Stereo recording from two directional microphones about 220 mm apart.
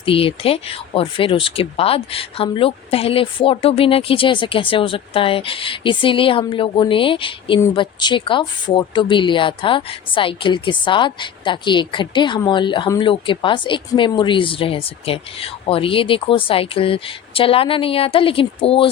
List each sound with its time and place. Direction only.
0.0 s speech: 25° left (ahead or behind)